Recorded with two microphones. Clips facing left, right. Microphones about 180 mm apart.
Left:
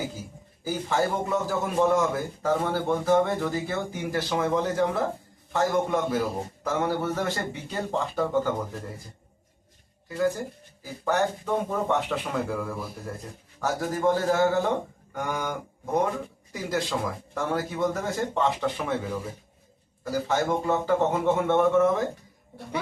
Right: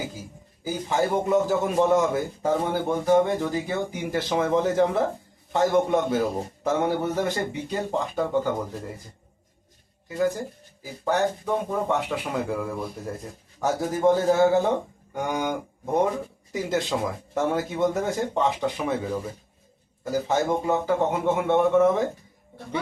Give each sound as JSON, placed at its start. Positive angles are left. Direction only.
{"t": 0.6, "sound": "a man's voice", "side_deg": -15}
{"t": 10.1, "sound": "a man's voice", "side_deg": -20}